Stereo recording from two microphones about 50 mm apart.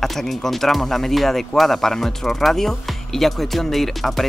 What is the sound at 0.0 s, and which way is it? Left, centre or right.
Speech, centre.